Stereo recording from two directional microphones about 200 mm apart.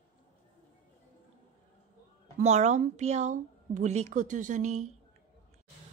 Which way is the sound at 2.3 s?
35° right (ahead or behind).